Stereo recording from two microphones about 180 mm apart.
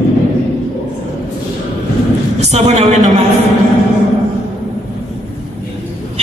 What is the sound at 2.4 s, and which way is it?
Speech, 35° right (ahead or behind).